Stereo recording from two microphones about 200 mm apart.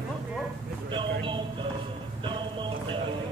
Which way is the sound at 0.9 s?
25° right (ahead or behind).